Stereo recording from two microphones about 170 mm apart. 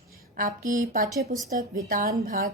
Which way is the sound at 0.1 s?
55° right (ahead or behind).